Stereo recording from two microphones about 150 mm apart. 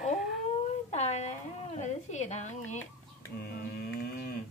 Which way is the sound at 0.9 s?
45° left (ahead or behind).